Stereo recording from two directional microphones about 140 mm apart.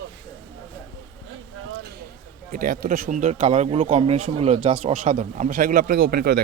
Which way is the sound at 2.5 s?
90° right.